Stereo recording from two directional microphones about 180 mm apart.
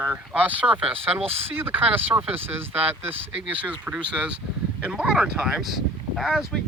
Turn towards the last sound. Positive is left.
turn(degrees=0)  # may be behind; listen again after turning